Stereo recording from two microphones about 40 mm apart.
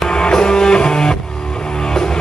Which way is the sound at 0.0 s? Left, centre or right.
Centre.